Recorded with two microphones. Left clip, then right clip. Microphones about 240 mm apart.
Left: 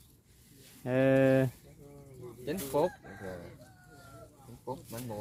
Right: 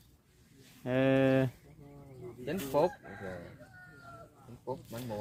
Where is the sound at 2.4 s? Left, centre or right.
Centre.